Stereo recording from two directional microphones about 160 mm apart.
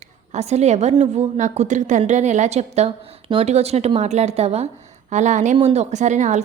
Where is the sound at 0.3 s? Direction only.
45° right (ahead or behind).